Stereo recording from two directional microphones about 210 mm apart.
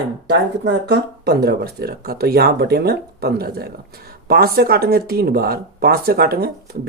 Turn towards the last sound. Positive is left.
turn(degrees=-45)  # may be behind; listen again after turning